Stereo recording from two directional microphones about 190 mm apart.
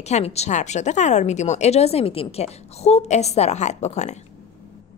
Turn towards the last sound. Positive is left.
turn(degrees=35)  # may be behind; listen again after turning